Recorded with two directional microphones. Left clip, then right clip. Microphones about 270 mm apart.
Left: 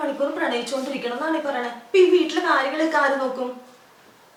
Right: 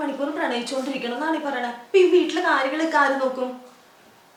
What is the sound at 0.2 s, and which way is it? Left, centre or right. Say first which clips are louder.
Speech: left 5 dB; right.